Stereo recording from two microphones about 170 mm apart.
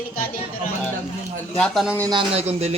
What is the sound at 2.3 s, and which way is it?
Speech, 40° right (ahead or behind).